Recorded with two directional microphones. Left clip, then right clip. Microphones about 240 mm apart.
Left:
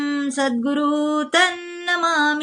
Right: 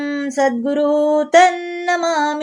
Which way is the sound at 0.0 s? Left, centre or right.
Centre.